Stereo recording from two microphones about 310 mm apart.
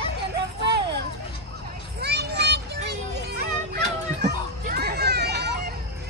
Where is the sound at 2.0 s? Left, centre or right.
Right.